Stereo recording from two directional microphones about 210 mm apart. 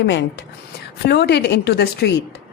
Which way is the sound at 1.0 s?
50° left (ahead or behind).